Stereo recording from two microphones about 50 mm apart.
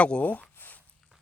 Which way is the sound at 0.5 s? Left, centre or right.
Left.